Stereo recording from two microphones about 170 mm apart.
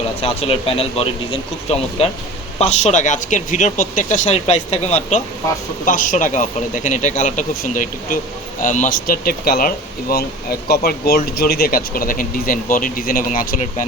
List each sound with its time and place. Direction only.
0.2 s a man's voice: 35° left (ahead or behind); by 13.8 s 50° left (ahead or behind)